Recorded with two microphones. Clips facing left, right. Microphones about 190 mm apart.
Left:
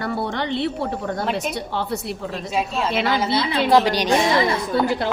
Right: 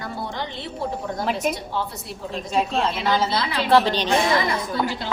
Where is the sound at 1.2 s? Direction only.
Centre (ahead or behind).